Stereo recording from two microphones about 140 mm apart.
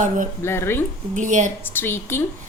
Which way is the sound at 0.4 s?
15° left (ahead or behind).